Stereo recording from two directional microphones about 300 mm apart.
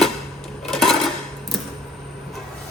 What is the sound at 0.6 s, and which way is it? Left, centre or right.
Dishes, centre.